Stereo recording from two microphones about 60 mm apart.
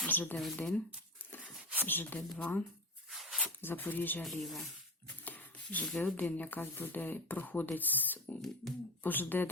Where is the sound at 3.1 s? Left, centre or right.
Centre.